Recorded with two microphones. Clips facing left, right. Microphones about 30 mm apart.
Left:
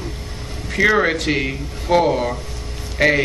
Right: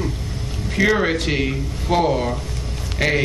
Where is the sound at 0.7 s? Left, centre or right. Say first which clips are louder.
Left 2 dB; centre.